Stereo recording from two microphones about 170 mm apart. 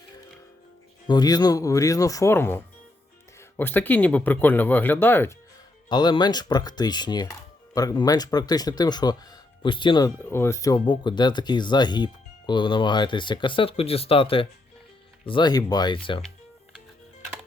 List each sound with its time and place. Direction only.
1.0 s speech: 25° left (ahead or behind)
5.9 s speech: 25° left (ahead or behind)
10.2 s speech: 15° left (ahead or behind); by 16.2 s 30° left (ahead or behind)